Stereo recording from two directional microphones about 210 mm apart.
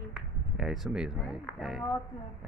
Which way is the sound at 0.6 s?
Centre (ahead or behind).